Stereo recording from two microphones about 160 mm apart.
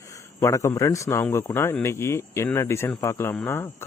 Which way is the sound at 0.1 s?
20° left (ahead or behind).